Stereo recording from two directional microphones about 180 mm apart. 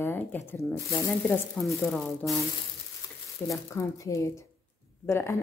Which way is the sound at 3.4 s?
15° left (ahead or behind).